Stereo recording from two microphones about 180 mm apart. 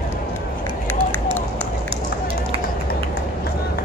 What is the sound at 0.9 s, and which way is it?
Run, 10° left (ahead or behind).